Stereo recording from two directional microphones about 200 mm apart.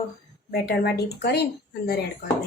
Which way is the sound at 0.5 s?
55° left (ahead or behind).